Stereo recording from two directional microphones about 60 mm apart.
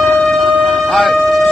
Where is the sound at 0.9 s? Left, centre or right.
Centre.